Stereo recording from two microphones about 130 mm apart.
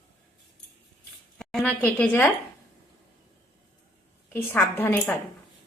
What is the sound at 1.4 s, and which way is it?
Speech, 5° left (ahead or behind).